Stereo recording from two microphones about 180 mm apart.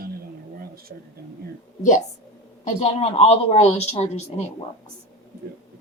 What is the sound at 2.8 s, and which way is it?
Speech, 35° left (ahead or behind).